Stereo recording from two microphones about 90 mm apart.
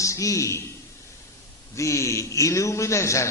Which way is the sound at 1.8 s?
35° left (ahead or behind).